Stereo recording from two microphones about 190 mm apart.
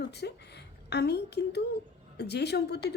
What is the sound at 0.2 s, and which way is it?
A woman's voice, 60° left (ahead or behind).